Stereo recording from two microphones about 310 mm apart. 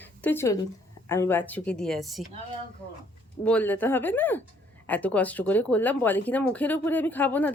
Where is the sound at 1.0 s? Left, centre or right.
Centre.